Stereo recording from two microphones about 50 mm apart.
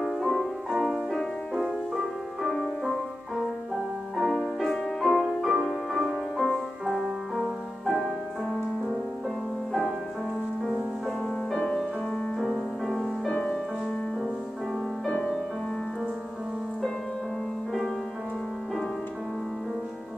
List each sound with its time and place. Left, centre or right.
0.0 s music: centre
9.7 s music: centre
12.8 s music: centre
13.3 s music: centre
15.0 s music: centre